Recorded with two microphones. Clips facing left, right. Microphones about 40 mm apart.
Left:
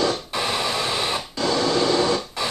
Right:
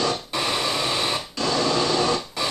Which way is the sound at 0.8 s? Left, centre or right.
Centre.